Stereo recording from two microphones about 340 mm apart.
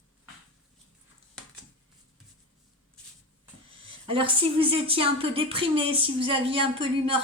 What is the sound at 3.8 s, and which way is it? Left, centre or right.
A woman's voice, centre.